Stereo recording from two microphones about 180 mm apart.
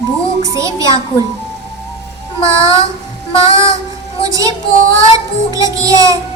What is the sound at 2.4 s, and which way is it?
Speech, 15° right (ahead or behind).